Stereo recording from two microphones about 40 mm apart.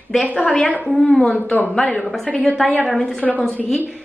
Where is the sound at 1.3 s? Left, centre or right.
Left.